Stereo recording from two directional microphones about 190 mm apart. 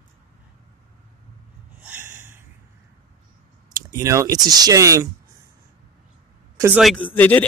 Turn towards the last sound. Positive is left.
turn(degrees=10)  # may be behind; listen again after turning